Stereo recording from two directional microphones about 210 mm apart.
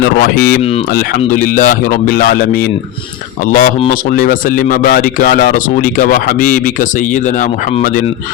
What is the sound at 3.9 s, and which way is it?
Speech, 40° left (ahead or behind).